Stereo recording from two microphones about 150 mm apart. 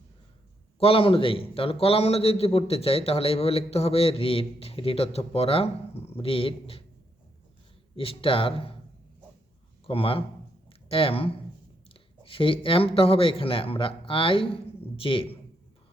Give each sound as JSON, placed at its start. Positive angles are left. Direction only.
{"t": 0.8, "sound": "a man's voice", "side_deg": 40}
{"t": 7.9, "sound": "a man's voice", "side_deg": 40}
{"t": 9.8, "sound": "speech", "side_deg": 40}
{"t": 10.7, "sound": "a sound", "side_deg": 35}
{"t": 11.9, "sound": "speech", "side_deg": 35}